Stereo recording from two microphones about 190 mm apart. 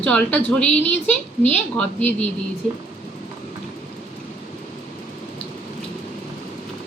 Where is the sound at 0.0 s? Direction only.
5° left (ahead or behind).